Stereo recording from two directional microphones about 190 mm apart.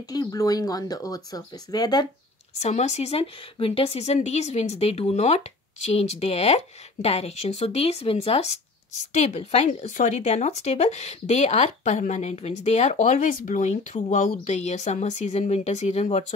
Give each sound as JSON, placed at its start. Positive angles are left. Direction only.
{"t": 0.1, "sound": "speech", "side_deg": 20}
{"t": 2.6, "sound": "speech", "side_deg": 35}